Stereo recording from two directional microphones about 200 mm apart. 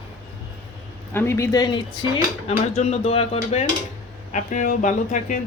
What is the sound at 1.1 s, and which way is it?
Speech, 15° left (ahead or behind).